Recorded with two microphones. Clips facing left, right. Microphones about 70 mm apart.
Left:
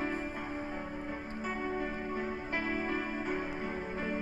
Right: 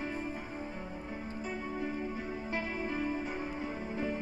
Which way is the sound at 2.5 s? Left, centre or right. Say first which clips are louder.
Left 2 dB; left.